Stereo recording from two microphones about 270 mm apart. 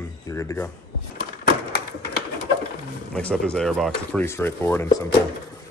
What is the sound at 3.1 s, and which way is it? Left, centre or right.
Speech, centre.